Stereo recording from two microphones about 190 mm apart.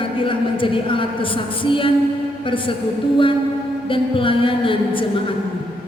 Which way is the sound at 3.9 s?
25° left (ahead or behind).